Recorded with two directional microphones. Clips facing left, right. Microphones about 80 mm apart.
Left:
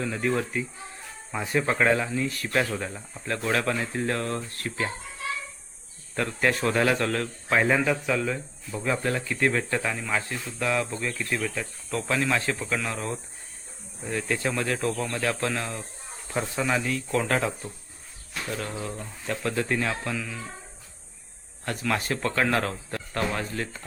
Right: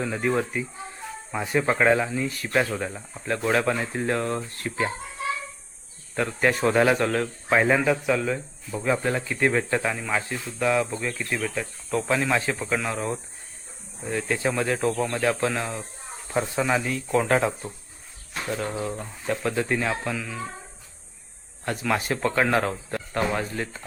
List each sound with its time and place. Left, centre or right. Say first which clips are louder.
0.0 s speech: right 2 dB; centre
6.1 s speech: right 2 dB; centre
21.6 s speech: right 2 dB; centre